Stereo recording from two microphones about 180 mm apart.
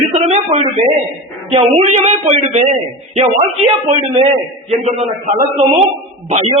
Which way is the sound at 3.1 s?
35° right (ahead or behind).